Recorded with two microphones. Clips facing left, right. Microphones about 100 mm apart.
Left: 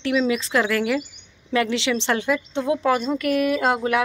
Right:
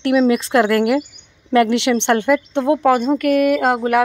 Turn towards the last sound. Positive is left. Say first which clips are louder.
# right 5 dB
turn(degrees=-50)  # may be behind; listen again after turning